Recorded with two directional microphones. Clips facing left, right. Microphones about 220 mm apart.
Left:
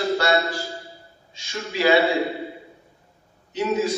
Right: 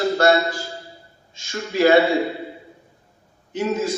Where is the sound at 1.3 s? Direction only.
45° right (ahead or behind).